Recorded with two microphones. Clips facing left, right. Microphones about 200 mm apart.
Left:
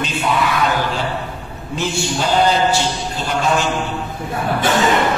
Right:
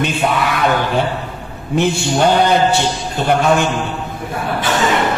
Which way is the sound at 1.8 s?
60° right (ahead or behind).